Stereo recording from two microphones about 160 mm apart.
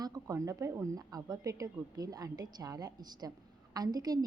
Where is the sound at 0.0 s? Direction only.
20° right (ahead or behind).